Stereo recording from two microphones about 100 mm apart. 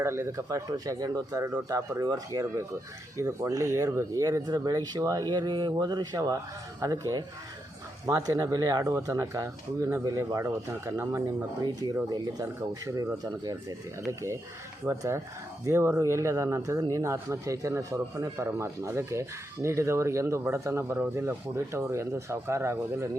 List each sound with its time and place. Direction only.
0.0 s speech: 25° right (ahead or behind)
11.6 s speech: 40° right (ahead or behind)